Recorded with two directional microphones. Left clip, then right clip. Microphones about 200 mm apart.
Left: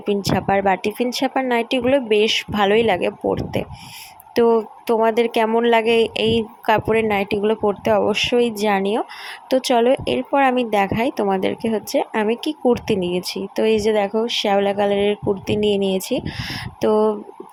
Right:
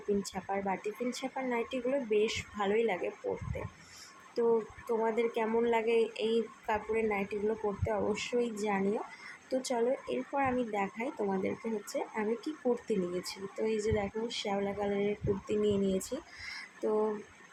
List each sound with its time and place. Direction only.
0.2 s a woman's voice: 45° left (ahead or behind)
4.4 s a woman's voice: 45° left (ahead or behind)